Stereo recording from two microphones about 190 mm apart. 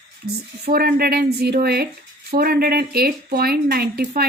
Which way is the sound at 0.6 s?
55° right (ahead or behind).